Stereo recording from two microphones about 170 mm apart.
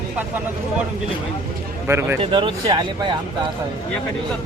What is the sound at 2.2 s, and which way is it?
Speech, 30° right (ahead or behind).